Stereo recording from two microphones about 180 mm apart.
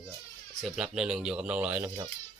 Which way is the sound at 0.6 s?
5° right (ahead or behind).